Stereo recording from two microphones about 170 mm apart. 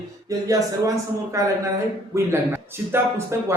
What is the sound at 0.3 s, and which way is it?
Speech, 20° right (ahead or behind).